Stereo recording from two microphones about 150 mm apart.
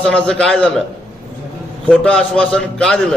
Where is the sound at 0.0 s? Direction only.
5° left (ahead or behind).